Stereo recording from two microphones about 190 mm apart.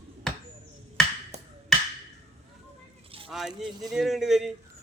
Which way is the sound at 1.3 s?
35° right (ahead or behind).